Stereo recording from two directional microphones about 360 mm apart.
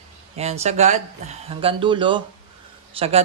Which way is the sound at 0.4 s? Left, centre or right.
Centre.